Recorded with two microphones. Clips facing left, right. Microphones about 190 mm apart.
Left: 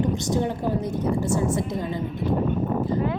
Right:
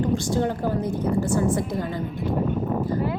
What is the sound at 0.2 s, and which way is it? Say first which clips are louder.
A woman's voice: right 1 dB; 20° left (ahead or behind).